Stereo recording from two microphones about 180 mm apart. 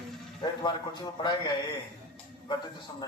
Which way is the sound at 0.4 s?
25° left (ahead or behind).